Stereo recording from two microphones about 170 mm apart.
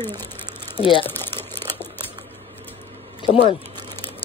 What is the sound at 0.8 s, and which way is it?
Speech, 30° left (ahead or behind).